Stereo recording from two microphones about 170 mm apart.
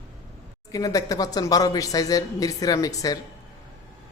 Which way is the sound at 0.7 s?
20° left (ahead or behind).